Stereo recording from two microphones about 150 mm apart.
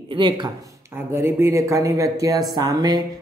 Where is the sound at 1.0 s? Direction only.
15° right (ahead or behind).